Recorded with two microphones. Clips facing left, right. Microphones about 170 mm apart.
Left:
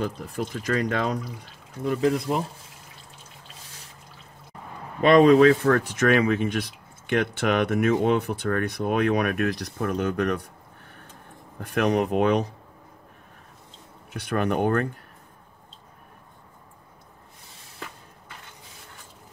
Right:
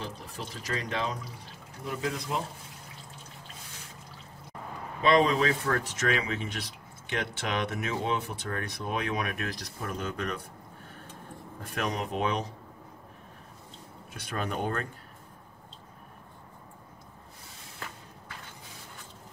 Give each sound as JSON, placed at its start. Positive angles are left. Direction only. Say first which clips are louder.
{"t": 0.0, "sound": "speech", "louder": "left 10 dB", "side_deg": 55}
{"t": 5.0, "sound": "speech", "louder": "left 9 dB", "side_deg": 65}
{"t": 11.7, "sound": "speech", "louder": "left 10 dB", "side_deg": 65}
{"t": 14.1, "sound": "speech", "louder": "left 9 dB", "side_deg": 65}